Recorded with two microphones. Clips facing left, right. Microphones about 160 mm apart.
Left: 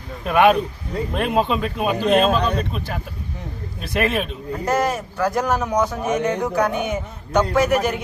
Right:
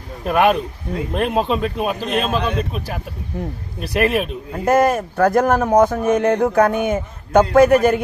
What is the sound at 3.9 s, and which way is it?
Speech, centre (ahead or behind).